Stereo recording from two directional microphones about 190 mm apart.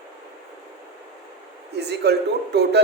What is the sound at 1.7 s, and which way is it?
A woman's voice, 60° right (ahead or behind).